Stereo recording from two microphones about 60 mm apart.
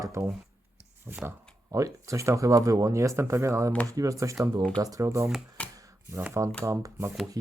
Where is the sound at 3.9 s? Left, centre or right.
Right.